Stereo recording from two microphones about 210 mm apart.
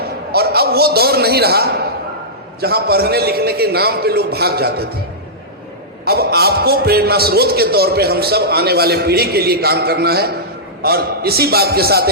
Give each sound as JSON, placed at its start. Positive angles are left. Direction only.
{"t": 0.3, "sound": "a man's voice", "side_deg": -50}
{"t": 6.1, "sound": "a man's voice", "side_deg": -50}